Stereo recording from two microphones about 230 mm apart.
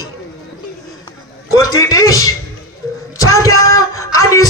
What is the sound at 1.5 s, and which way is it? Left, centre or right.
A man's voice, centre.